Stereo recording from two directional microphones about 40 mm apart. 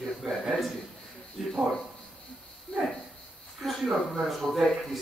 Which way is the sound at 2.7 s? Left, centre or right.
Left.